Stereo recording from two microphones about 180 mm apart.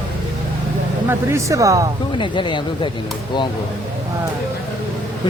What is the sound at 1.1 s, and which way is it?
Speech, 15° right (ahead or behind).